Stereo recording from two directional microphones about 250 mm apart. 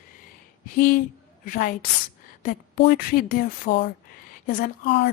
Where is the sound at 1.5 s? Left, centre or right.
Left.